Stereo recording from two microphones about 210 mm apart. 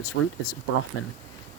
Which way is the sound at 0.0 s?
90° left.